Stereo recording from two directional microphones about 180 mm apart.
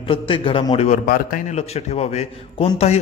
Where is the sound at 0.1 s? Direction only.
30° left (ahead or behind).